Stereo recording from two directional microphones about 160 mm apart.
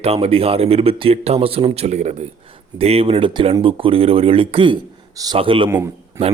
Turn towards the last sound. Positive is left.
turn(degrees=-15)  # may be behind; listen again after turning